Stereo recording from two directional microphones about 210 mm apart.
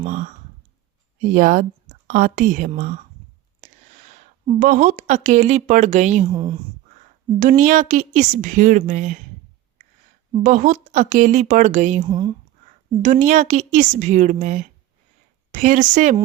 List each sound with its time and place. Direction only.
0.0 s a woman's voice: 35° right (ahead or behind)
6.3 s speech: 20° right (ahead or behind)
7.3 s a woman's voice: 35° right (ahead or behind)
10.4 s a woman's voice: 35° right (ahead or behind)
12.0 s speech: 25° right (ahead or behind)
13.0 s a woman's voice: 35° right (ahead or behind)